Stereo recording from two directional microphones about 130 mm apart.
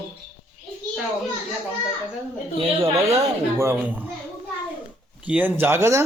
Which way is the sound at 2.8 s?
20° right (ahead or behind).